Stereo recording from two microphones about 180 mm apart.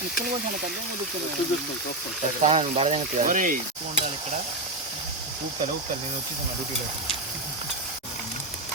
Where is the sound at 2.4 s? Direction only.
35° right (ahead or behind).